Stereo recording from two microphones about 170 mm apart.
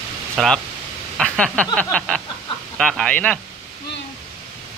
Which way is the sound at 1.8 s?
5° left (ahead or behind).